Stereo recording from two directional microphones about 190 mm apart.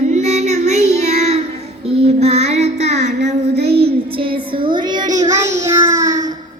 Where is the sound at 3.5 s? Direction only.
55° right (ahead or behind).